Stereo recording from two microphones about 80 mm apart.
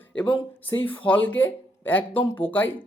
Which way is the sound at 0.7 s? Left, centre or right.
Left.